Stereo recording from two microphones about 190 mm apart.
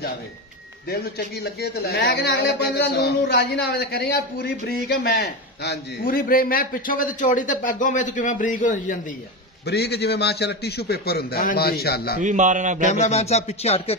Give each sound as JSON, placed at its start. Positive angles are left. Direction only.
{"t": 0.8, "sound": "a man's voice", "side_deg": 55}
{"t": 9.7, "sound": "a man's voice", "side_deg": 60}
{"t": 12.2, "sound": "a man's voice", "side_deg": -40}
{"t": 12.9, "sound": "speech", "side_deg": 35}